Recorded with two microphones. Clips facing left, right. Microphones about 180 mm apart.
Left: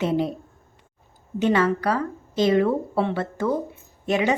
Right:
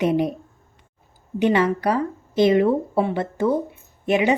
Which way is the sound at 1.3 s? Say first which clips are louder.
Right 2 dB; 15° right (ahead or behind).